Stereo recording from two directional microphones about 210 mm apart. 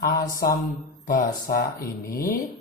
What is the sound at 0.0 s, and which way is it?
A woman's voice, 45° left (ahead or behind).